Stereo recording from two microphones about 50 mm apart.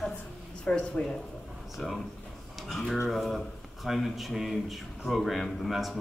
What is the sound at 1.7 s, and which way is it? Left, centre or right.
Speech, centre.